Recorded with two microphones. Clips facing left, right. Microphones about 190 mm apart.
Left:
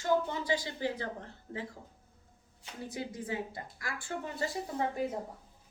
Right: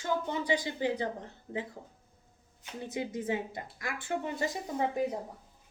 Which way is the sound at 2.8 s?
20° right (ahead or behind).